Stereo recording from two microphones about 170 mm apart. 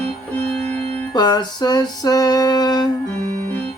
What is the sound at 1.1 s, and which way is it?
Music, 25° left (ahead or behind).